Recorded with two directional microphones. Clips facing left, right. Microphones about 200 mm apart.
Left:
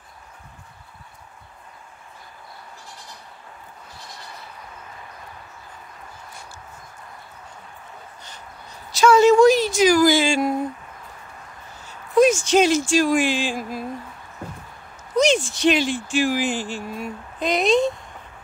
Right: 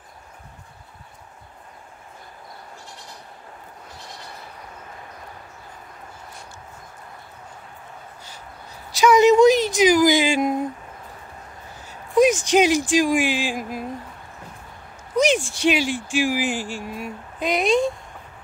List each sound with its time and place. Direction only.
8.9 s a sound: 15° right (ahead or behind)
11.9 s speech: 15° right (ahead or behind)
15.1 s speech: 10° right (ahead or behind)